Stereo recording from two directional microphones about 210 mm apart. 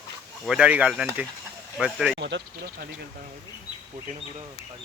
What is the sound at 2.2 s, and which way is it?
Speech, 55° right (ahead or behind).